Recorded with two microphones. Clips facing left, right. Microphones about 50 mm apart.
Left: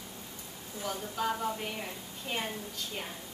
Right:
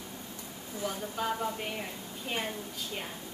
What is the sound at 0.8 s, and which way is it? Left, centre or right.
Speech, centre.